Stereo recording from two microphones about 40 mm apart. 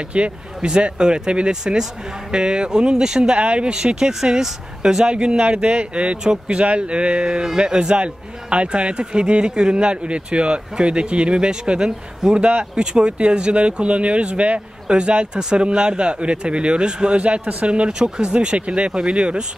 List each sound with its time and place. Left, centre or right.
0.0 s speech: right